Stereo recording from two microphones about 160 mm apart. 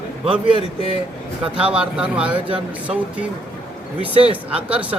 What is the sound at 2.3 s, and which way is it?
Speech, 35° right (ahead or behind).